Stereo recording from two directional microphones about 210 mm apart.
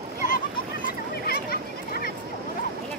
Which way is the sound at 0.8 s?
45° left (ahead or behind).